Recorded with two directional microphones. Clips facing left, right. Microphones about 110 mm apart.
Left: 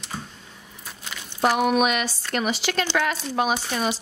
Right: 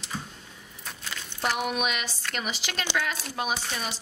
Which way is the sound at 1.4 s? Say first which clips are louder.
Left 8 dB; 70° left (ahead or behind).